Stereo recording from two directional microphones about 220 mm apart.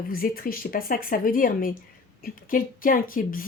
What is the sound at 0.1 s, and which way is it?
Speech, 40° left (ahead or behind).